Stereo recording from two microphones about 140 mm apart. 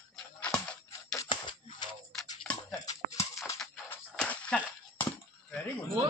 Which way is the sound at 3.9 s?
10° left (ahead or behind).